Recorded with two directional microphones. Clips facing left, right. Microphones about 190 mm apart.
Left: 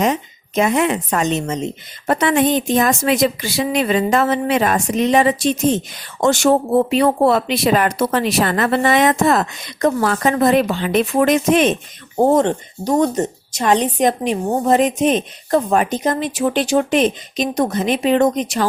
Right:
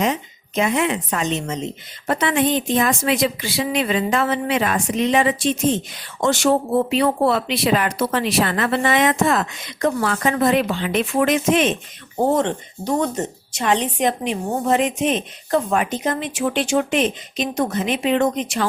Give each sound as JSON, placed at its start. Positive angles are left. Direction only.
{"t": 0.0, "sound": "a woman's voice", "side_deg": 45}